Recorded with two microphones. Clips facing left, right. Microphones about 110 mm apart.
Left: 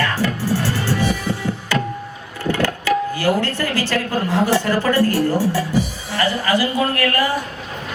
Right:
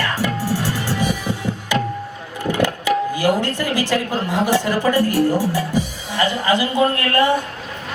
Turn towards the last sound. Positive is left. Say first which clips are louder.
# right 2 dB
turn(degrees=-25)  # may be behind; listen again after turning